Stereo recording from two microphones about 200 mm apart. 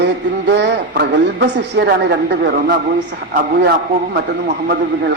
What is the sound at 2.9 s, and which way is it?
Speech, 45° right (ahead or behind).